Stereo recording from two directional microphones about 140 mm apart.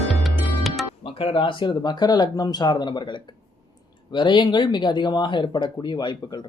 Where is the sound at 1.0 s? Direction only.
40° left (ahead or behind).